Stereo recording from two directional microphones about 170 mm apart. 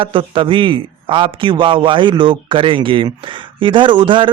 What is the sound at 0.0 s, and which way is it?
A man's voice, 30° right (ahead or behind).